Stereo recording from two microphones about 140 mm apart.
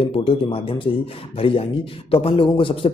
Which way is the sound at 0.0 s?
45° left (ahead or behind).